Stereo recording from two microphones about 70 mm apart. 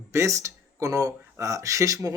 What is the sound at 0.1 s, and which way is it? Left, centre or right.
Speech, right.